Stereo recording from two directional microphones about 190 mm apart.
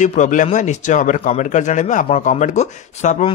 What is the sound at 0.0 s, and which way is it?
Speech, 40° left (ahead or behind).